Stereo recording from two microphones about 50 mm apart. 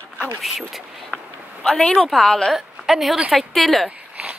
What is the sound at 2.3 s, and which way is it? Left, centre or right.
Speech, centre.